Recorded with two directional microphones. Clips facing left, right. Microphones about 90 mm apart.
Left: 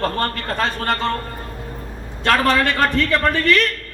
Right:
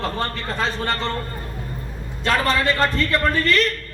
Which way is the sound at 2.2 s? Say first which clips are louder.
Left 3 dB; 65° left (ahead or behind).